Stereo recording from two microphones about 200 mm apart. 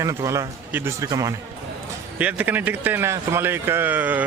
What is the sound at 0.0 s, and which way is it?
Speech, 15° right (ahead or behind).